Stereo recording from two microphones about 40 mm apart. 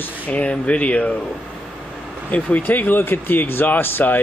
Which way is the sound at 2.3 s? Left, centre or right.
Left.